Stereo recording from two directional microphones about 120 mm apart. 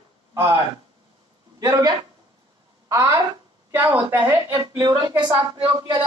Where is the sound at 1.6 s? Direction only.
30° right (ahead or behind).